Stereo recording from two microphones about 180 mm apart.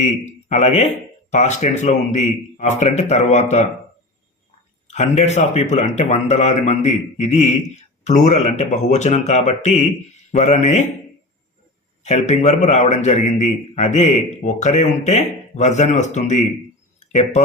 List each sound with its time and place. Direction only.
0.0 s speech: 40° left (ahead or behind)
4.9 s speech: 40° left (ahead or behind)
12.0 s speech: 35° left (ahead or behind)